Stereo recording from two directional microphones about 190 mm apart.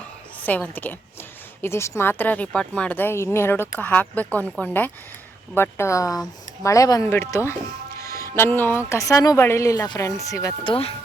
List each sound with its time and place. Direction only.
0.4 s a woman's voice: 10° left (ahead or behind)
7.9 s music: 15° left (ahead or behind)
8.9 s a woman's voice: 15° left (ahead or behind)